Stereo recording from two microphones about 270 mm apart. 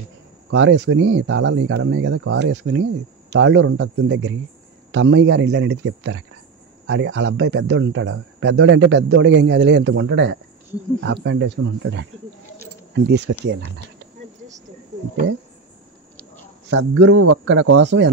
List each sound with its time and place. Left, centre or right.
0.5 s a man's voice: right
16.7 s speech: right